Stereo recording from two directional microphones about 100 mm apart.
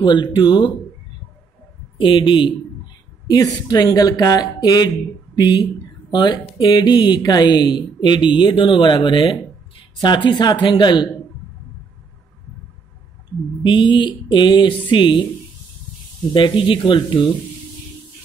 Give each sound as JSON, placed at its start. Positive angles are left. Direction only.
{"t": 0.0, "sound": "speech", "side_deg": 50}
{"t": 2.0, "sound": "speech", "side_deg": 55}
{"t": 3.3, "sound": "speech", "side_deg": 40}
{"t": 13.6, "sound": "speech", "side_deg": 55}
{"t": 16.3, "sound": "speech", "side_deg": 55}